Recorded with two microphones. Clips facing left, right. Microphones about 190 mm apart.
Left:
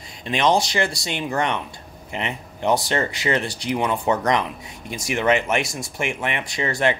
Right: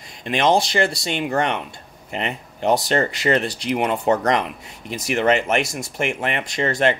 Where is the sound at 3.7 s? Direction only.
50° right (ahead or behind).